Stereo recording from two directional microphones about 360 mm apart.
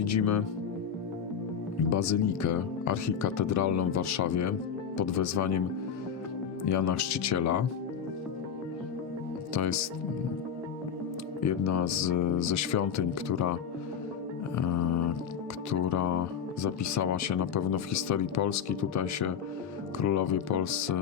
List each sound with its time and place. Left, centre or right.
0.0 s speech: left
1.9 s speech: left
6.7 s speech: left
11.4 s speech: left
14.5 s music: left
15.7 s speech: left